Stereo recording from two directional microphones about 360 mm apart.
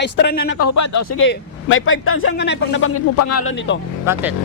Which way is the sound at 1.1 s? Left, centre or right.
Left.